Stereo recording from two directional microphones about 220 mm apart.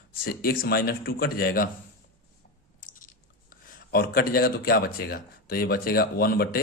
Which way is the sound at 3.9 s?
45° left (ahead or behind).